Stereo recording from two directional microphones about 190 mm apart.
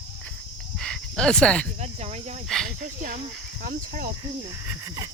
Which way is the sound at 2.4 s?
Centre (ahead or behind).